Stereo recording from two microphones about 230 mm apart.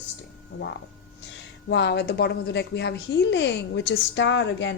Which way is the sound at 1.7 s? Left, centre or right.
Left.